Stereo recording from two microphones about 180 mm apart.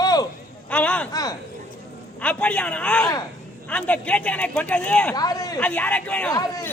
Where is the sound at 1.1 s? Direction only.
20° left (ahead or behind).